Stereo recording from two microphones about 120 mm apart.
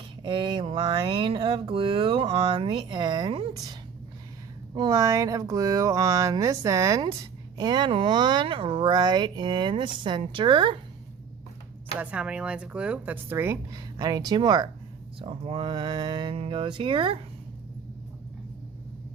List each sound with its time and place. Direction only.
0.2 s speech: 45° right (ahead or behind)
11.9 s speech: 10° right (ahead or behind)
13.9 s speech: 30° right (ahead or behind)
15.2 s speech: 50° right (ahead or behind)